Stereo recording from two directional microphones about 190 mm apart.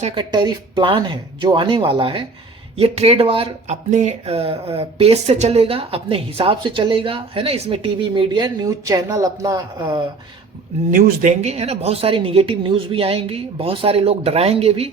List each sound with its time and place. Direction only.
0.0 s speech: 25° right (ahead or behind)
10.9 s speech: 45° right (ahead or behind)